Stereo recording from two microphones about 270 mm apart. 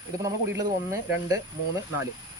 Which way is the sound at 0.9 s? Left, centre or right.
Centre.